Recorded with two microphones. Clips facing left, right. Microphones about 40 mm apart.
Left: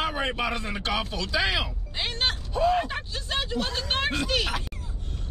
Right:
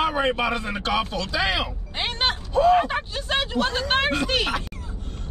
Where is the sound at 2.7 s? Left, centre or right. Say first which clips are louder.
Right 6 dB; centre.